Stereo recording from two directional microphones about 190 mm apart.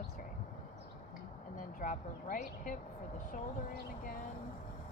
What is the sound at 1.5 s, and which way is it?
Speech, 45° left (ahead or behind).